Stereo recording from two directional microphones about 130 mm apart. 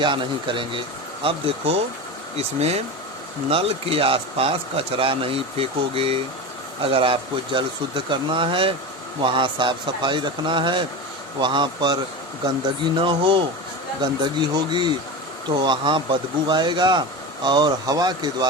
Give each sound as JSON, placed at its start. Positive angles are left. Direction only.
{"t": 0.0, "sound": "speech", "side_deg": -40}
{"t": 13.0, "sound": "speech", "side_deg": -40}